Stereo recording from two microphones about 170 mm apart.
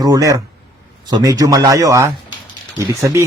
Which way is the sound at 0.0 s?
20° right (ahead or behind).